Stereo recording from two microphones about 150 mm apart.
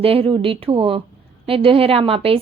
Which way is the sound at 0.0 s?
40° right (ahead or behind).